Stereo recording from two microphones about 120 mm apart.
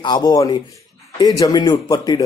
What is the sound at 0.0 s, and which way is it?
A man's voice, 35° left (ahead or behind).